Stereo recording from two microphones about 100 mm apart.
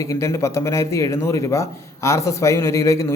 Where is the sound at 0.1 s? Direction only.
30° left (ahead or behind).